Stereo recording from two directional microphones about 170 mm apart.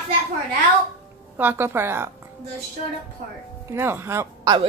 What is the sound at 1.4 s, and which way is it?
Speech, 10° right (ahead or behind).